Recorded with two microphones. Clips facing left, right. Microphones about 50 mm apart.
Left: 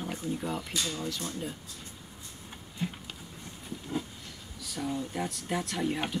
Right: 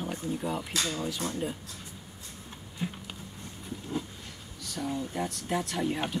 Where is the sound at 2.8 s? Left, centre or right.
Centre.